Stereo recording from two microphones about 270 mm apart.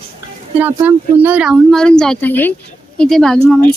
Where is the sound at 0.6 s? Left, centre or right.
Centre.